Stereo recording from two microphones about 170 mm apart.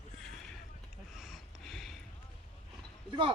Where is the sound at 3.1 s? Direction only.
30° right (ahead or behind).